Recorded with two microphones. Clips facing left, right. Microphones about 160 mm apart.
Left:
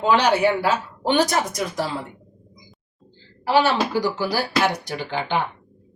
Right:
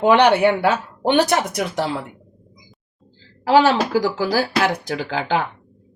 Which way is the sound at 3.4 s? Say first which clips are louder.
Right 4 dB; 90° right.